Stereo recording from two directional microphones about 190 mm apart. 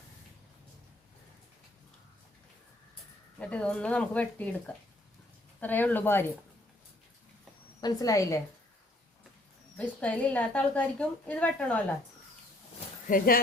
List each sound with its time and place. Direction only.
3.3 s a woman's voice: 5° left (ahead or behind)
7.8 s a woman's voice: 20° left (ahead or behind)
9.7 s a woman's voice: 5° left (ahead or behind)
13.1 s speech: 50° left (ahead or behind)